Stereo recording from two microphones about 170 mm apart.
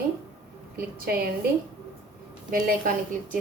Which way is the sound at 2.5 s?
55° right (ahead or behind).